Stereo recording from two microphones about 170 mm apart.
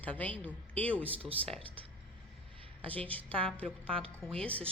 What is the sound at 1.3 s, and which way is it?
Speech, 35° right (ahead or behind).